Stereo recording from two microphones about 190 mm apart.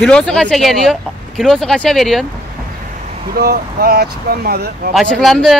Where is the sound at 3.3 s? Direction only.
55° right (ahead or behind).